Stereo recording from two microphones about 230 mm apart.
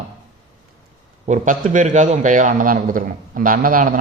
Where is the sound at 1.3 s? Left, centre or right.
Right.